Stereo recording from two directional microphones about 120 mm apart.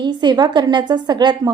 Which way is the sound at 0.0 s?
35° right (ahead or behind).